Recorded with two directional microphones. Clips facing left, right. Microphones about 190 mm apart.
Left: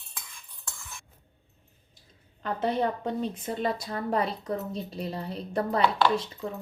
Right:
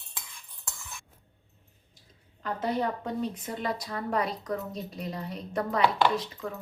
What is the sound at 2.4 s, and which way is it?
A woman's voice, 25° left (ahead or behind).